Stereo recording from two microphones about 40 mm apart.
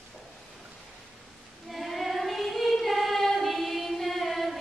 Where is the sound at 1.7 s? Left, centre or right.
Centre.